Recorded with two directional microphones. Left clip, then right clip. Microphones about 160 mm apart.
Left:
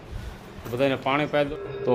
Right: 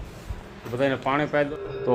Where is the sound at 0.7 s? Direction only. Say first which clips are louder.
Even; centre (ahead or behind).